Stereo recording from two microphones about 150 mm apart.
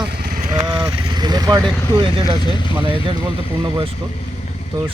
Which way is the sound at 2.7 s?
35° right (ahead or behind).